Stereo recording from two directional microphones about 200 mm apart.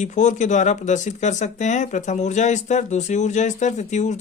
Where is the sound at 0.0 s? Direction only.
35° left (ahead or behind).